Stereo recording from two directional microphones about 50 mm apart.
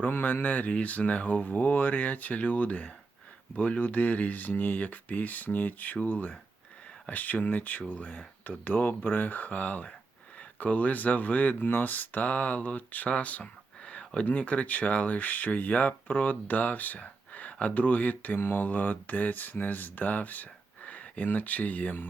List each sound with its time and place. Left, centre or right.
0.0 s speech: left
13.4 s a sound: left
14.3 s speech: left